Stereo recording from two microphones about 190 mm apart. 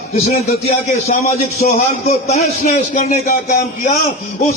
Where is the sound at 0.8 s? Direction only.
35° left (ahead or behind).